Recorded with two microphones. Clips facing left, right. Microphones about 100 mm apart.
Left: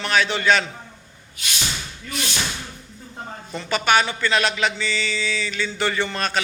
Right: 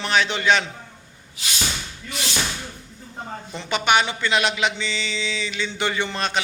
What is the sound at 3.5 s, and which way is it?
Speech, 20° right (ahead or behind).